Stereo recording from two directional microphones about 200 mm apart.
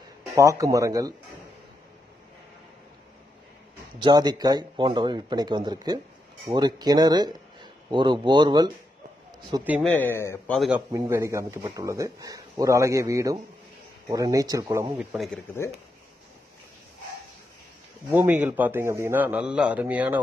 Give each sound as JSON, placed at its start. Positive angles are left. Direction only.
{"t": 0.4, "sound": "speech", "side_deg": -15}
{"t": 4.0, "sound": "speech", "side_deg": -20}
{"t": 9.8, "sound": "a man's voice", "side_deg": 10}
{"t": 10.5, "sound": "a man's voice", "side_deg": 0}
{"t": 10.9, "sound": "speech", "side_deg": -15}
{"t": 15.1, "sound": "a man's voice", "side_deg": 0}
{"t": 18.1, "sound": "speech", "side_deg": -10}